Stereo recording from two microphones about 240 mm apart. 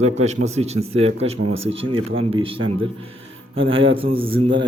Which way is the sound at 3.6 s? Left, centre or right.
Right.